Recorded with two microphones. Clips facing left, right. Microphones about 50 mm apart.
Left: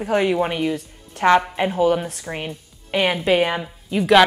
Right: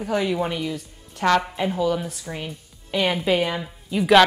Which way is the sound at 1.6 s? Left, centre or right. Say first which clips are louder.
Left 4 dB; left.